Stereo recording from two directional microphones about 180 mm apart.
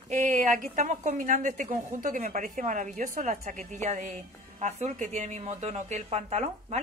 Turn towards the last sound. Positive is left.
turn(degrees=-40)  # may be behind; listen again after turning